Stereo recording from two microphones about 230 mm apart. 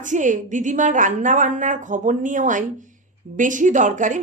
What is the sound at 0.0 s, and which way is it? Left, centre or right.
A woman's voice, right.